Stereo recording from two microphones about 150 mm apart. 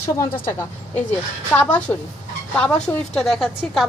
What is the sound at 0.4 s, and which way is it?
Speech, 15° left (ahead or behind).